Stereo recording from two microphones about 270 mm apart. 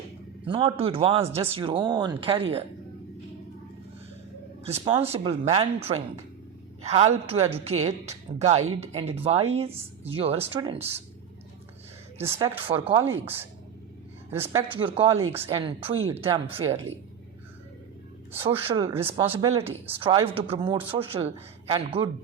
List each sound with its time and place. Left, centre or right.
0.4 s a man's voice: centre
4.6 s a man's voice: right
12.1 s speech: centre
14.8 s a man's voice: centre
18.4 s a man's voice: centre